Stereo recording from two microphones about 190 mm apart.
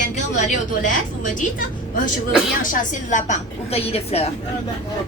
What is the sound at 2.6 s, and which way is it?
A woman's voice, 45° left (ahead or behind).